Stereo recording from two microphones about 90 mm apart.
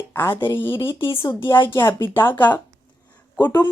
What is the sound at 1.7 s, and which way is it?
Speech, 30° left (ahead or behind).